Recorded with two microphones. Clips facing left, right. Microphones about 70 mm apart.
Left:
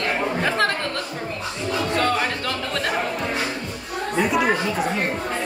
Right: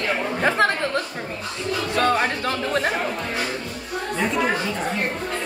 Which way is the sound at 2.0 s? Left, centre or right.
Right.